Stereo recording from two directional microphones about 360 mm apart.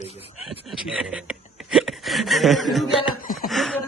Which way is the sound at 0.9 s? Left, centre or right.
Centre.